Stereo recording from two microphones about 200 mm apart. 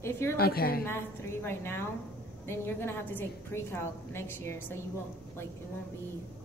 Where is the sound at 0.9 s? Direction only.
10° left (ahead or behind).